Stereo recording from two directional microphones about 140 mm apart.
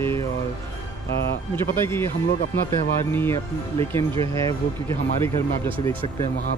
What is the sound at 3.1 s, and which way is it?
Speech, 15° left (ahead or behind).